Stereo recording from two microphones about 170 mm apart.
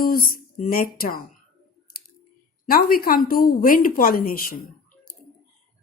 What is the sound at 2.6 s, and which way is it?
Speech, 60° left (ahead or behind).